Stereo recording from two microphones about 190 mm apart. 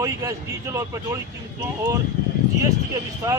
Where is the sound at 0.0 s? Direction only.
15° right (ahead or behind).